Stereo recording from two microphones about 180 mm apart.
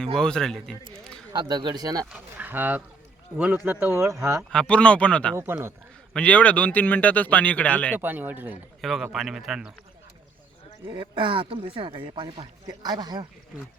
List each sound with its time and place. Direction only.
0.2 s a man's voice: 5° left (ahead or behind)
1.3 s speech: 25° right (ahead or behind)
2.0 s speech: 10° right (ahead or behind)
4.5 s speech: 5° left (ahead or behind)
5.3 s speech: 15° right (ahead or behind)
6.1 s speech: 5° left (ahead or behind)
7.9 s speech: 10° right (ahead or behind)
8.8 s a man's voice: centre (ahead or behind)
10.8 s speech: 25° right (ahead or behind)